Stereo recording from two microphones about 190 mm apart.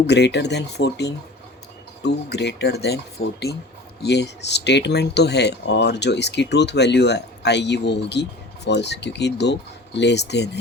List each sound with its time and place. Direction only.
0.1 s speech: 65° left (ahead or behind)